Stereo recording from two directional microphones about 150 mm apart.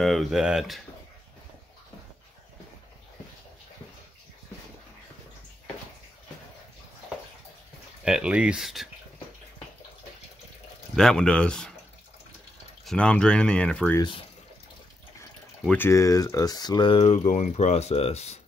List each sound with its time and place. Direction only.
0.0 s speech: centre (ahead or behind)
8.0 s speech: 5° right (ahead or behind)
11.0 s speech: 5° left (ahead or behind)
12.8 s speech: 5° left (ahead or behind)
15.6 s speech: 10° left (ahead or behind)
15.9 s speech: 20° left (ahead or behind); by 18.4 s 45° left (ahead or behind)